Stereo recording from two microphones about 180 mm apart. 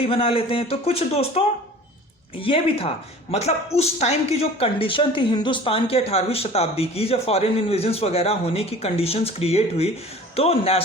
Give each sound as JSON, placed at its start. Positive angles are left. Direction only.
{"t": 0.0, "sound": "speech", "side_deg": 30}